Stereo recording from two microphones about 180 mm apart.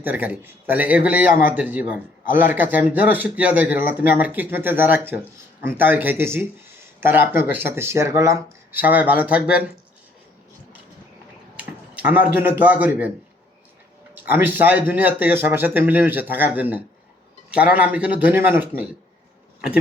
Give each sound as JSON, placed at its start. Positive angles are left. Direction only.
{"t": 0.0, "sound": "a man's voice", "side_deg": -10}
{"t": 11.5, "sound": "a man's voice", "side_deg": -5}
{"t": 14.3, "sound": "a man's voice", "side_deg": -10}